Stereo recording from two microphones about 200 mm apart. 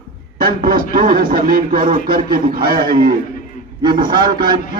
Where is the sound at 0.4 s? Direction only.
45° right (ahead or behind).